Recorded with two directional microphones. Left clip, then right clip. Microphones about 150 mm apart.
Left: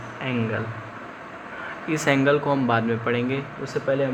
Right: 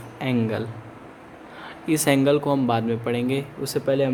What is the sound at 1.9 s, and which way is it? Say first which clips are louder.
Speech: right 1 dB; 65° right (ahead or behind).